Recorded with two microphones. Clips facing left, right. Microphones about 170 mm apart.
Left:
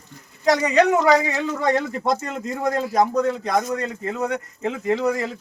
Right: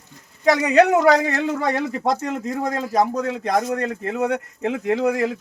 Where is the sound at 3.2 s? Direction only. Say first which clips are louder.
Left 2 dB; 75° right (ahead or behind).